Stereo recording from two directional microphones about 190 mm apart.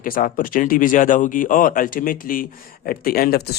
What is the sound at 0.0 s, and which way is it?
Speech, 45° left (ahead or behind).